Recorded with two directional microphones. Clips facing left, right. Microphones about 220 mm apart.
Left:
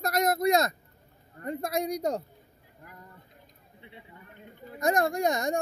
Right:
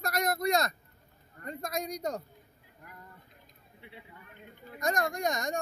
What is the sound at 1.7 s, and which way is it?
Speech, 65° left (ahead or behind).